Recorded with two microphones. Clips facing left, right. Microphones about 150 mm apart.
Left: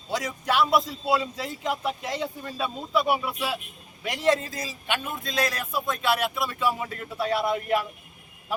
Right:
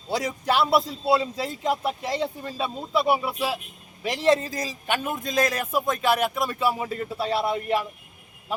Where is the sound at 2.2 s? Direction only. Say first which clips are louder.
Right 2 dB; 30° right (ahead or behind).